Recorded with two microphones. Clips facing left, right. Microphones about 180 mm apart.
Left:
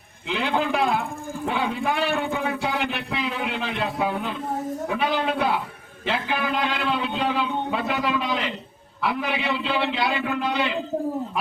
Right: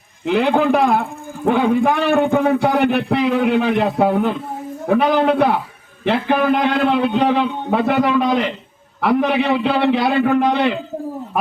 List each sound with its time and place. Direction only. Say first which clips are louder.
0.3 s a man's voice: right 9 dB; 55° right (ahead or behind)